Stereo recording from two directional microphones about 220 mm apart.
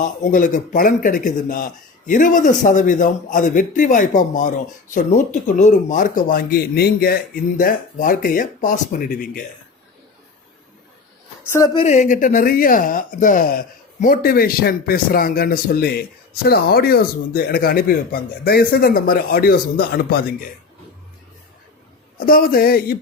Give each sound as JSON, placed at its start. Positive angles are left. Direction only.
{"t": 0.0, "sound": "speech", "side_deg": 35}
{"t": 11.5, "sound": "speech", "side_deg": 20}
{"t": 11.9, "sound": "speech", "side_deg": 35}
{"t": 22.3, "sound": "a man's voice", "side_deg": 40}